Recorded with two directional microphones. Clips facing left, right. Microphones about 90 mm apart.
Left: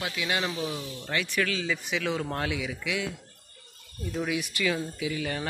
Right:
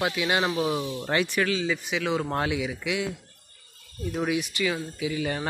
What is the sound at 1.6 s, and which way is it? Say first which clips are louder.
Speech: right 3 dB; 10° right (ahead or behind).